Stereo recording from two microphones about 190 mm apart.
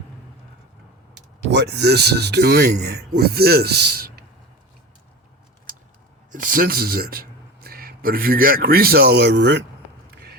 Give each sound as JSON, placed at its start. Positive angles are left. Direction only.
{"t": 1.5, "sound": "speech", "side_deg": -60}
{"t": 6.3, "sound": "speech", "side_deg": -45}